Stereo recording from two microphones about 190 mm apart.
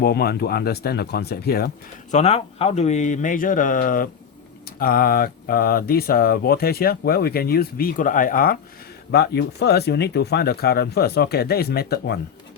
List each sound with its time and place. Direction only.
0.0 s speech: 55° left (ahead or behind)
2.1 s speech: 35° left (ahead or behind)
9.1 s speech: 55° left (ahead or behind)